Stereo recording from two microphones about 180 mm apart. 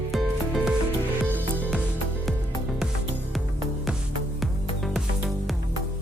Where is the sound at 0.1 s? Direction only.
Centre (ahead or behind).